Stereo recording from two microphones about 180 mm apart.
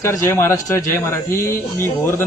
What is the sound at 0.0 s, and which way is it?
Speech, 15° left (ahead or behind).